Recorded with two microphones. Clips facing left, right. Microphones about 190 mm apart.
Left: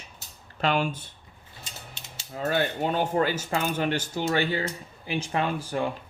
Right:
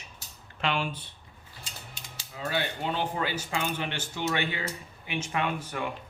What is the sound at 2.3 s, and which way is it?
Speech, 45° left (ahead or behind).